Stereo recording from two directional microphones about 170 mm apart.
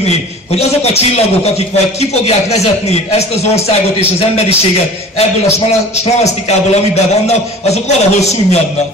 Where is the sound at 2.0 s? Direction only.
40° left (ahead or behind).